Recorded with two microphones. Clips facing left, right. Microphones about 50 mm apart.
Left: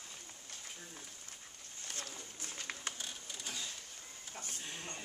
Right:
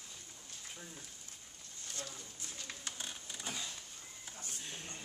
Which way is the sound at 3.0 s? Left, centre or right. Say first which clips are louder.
Right 1 dB; right.